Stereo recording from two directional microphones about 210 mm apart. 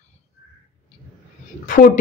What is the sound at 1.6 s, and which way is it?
Speech, 40° left (ahead or behind).